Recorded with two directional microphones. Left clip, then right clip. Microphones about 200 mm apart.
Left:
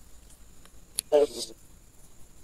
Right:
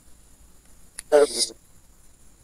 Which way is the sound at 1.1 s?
30° right (ahead or behind).